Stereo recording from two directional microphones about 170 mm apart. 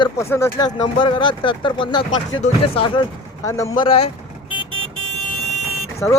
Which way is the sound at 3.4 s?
20° left (ahead or behind).